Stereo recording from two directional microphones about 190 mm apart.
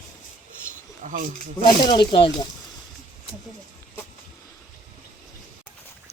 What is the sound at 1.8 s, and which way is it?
Speech, 25° left (ahead or behind).